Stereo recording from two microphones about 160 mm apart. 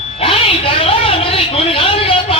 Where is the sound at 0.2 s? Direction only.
35° left (ahead or behind).